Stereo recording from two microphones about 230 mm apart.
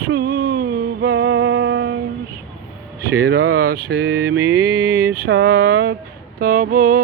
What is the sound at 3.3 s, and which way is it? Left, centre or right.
Mantra, right.